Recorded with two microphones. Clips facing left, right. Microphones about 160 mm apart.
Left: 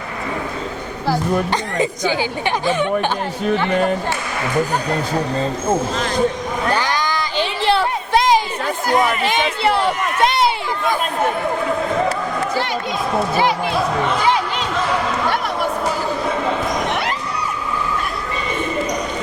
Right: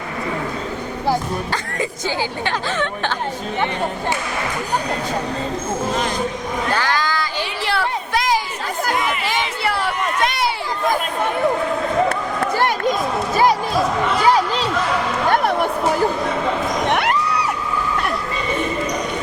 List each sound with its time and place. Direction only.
2.6 s speech: 15° left (ahead or behind)
6.7 s a sound: 15° left (ahead or behind)
9.2 s speech: 20° left (ahead or behind)
12.5 s speech: 50° right (ahead or behind)
14.3 s speech: 40° right (ahead or behind)
16.9 s a sound: 60° right (ahead or behind)